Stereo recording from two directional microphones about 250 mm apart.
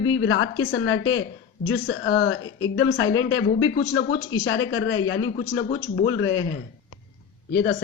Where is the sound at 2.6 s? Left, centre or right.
Left.